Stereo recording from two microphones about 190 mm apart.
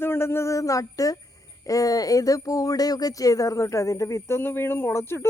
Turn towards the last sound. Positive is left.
turn(degrees=15)  # may be behind; listen again after turning